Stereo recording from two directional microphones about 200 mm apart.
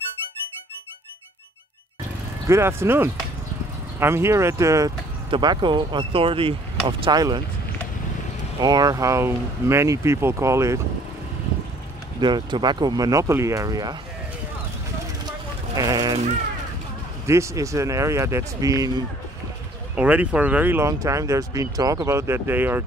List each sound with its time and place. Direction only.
2.4 s speech: 15° right (ahead or behind)
8.5 s speech: 20° right (ahead or behind)
12.2 s speech: 20° right (ahead or behind)
15.7 s speech: 20° right (ahead or behind)
17.3 s speech: 15° right (ahead or behind)
20.0 s speech: 5° right (ahead or behind)